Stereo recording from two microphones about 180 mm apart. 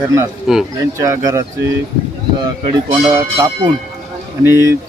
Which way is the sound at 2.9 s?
20° right (ahead or behind).